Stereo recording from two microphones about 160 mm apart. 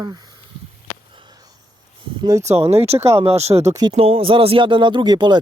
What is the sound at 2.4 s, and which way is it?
Speech, 45° right (ahead or behind).